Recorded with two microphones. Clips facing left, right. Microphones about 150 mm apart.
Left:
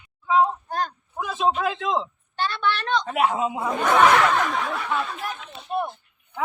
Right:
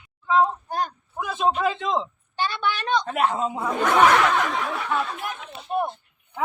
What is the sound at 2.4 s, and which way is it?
Speech, 15° right (ahead or behind).